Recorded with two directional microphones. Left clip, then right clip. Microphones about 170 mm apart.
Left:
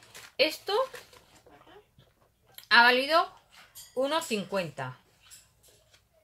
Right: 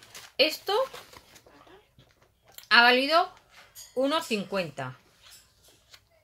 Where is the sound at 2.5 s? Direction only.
10° right (ahead or behind).